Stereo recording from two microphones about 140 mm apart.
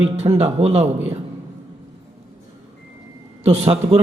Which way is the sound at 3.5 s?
45° right (ahead or behind).